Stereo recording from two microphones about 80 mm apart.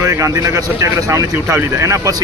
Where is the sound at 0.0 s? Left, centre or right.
Right.